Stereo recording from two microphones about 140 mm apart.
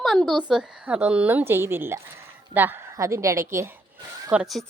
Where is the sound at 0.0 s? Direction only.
Centre (ahead or behind); by 3.7 s 20° right (ahead or behind).